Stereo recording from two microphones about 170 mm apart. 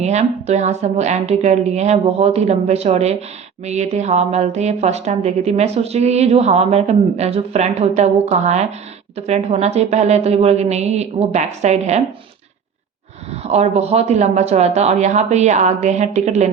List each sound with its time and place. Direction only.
0.0 s a woman's voice: 40° right (ahead or behind)
13.3 s a woman's voice: 40° right (ahead or behind)